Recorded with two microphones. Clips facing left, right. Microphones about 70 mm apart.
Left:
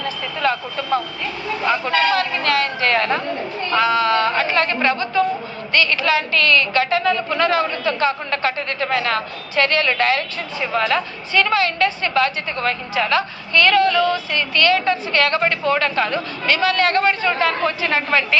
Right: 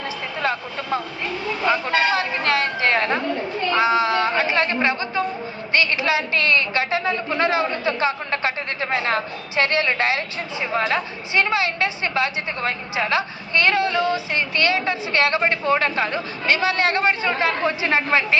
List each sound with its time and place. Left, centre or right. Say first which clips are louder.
0.0 s vehicle: left 3 dB; right
1.9 s speech: left 2 dB; right
3.8 s a woman's voice: left 2 dB; centre